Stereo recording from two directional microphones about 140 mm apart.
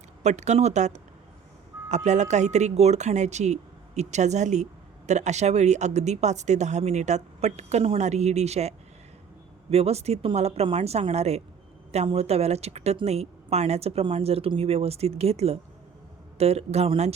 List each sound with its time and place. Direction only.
0.2 s speech: 55° right (ahead or behind)